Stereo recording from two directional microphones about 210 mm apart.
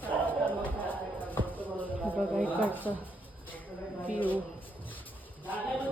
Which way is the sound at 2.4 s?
10° left (ahead or behind).